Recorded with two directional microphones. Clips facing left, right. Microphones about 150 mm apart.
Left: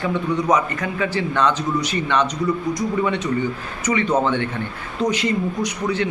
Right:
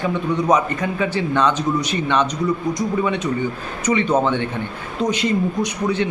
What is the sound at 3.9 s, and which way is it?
Speech, 20° right (ahead or behind).